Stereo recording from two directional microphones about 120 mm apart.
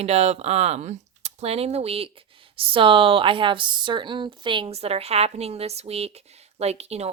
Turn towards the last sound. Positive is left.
turn(degrees=-60)  # may be behind; listen again after turning